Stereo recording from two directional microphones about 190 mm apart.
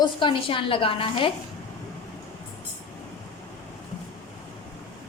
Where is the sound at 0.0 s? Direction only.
25° left (ahead or behind).